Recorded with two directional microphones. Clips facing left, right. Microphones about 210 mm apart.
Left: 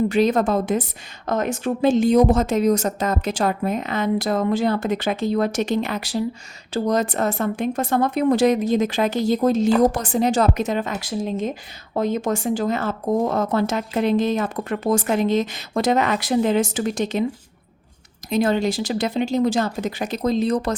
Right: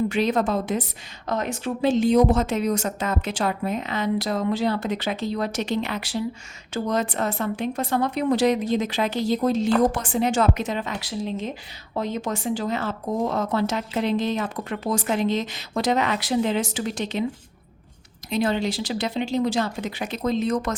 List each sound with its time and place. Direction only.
0.1 s speech: 45° left (ahead or behind)
18.3 s speech: 45° left (ahead or behind)